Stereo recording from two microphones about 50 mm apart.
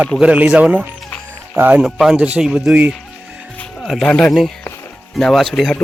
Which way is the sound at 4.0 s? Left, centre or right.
Centre.